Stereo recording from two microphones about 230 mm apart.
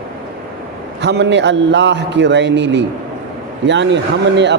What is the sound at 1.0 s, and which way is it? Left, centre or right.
A man's voice, right.